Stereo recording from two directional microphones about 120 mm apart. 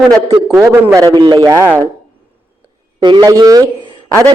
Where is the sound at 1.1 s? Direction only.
40° right (ahead or behind).